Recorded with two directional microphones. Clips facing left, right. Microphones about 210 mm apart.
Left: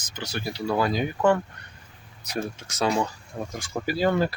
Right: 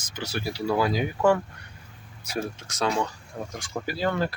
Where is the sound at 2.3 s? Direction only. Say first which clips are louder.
Even; 5° left (ahead or behind).